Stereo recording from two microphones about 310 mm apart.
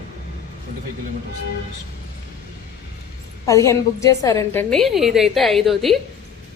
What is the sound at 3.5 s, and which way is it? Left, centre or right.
A woman's voice, centre.